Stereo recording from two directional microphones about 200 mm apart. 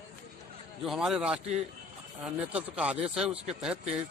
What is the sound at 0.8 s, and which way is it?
Speech, centre (ahead or behind).